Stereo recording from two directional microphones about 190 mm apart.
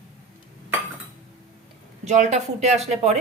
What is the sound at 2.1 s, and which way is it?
Speech, 40° right (ahead or behind).